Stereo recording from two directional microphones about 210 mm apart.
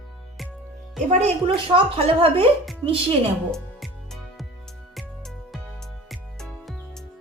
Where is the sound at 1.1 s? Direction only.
30° right (ahead or behind).